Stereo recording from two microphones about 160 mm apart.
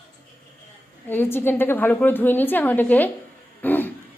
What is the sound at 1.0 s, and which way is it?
A woman's voice, 15° left (ahead or behind).